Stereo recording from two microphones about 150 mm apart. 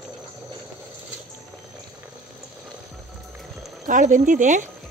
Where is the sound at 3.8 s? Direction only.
55° right (ahead or behind).